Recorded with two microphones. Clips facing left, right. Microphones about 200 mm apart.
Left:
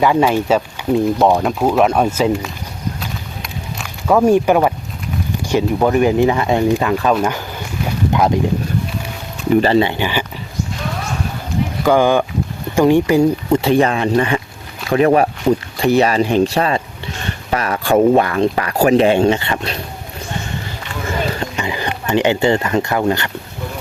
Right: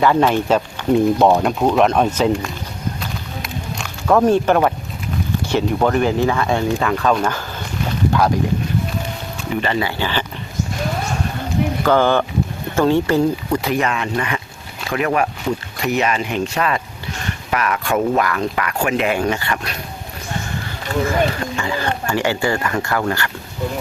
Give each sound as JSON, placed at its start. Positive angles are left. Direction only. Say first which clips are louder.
{"t": 0.0, "sound": "speech", "louder": "left 1 dB", "side_deg": 10}
{"t": 3.0, "sound": "a sound", "louder": "even", "side_deg": 0}
{"t": 5.5, "sound": "speech", "louder": "left 3 dB", "side_deg": 10}
{"t": 7.9, "sound": "boat", "louder": "left 1 dB", "side_deg": 20}
{"t": 9.6, "sound": "speech", "louder": "left 6 dB", "side_deg": 30}
{"t": 11.9, "sound": "speech", "louder": "left 3 dB", "side_deg": 15}
{"t": 13.5, "sound": "speech", "louder": "left 6 dB", "side_deg": 25}
{"t": 21.5, "sound": "speech", "louder": "right 1 dB", "side_deg": 20}